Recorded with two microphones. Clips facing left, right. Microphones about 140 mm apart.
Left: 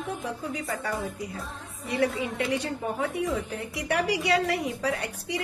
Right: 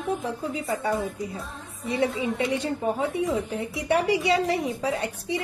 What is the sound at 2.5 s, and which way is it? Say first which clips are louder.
Speech: right 3 dB; 25° right (ahead or behind).